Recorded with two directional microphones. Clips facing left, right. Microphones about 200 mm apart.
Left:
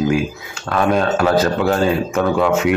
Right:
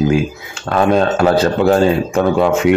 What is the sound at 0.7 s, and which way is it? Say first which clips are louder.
Speech: right 3 dB; 35° right (ahead or behind).